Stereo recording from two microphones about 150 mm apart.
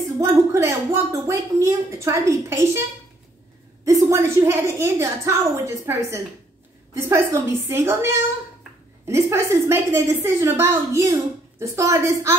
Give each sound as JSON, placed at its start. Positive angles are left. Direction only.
{"t": 0.2, "sound": "speech", "side_deg": -20}
{"t": 3.8, "sound": "a woman's voice", "side_deg": -20}